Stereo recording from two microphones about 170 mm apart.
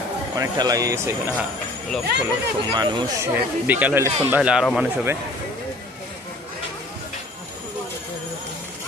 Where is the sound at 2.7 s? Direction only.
25° right (ahead or behind).